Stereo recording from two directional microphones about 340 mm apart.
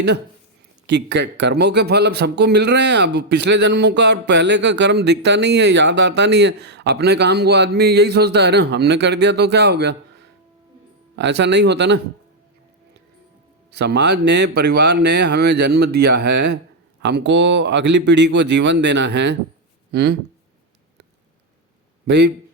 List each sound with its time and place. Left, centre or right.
0.9 s speech: right
11.2 s speech: right
13.7 s a man's voice: right
22.0 s a man's voice: right